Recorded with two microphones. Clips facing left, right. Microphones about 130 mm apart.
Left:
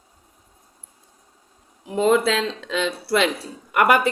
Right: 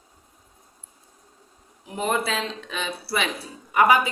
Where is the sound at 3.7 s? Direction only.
70° left (ahead or behind).